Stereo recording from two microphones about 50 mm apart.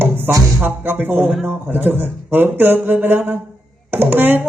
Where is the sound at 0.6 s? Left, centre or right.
Right.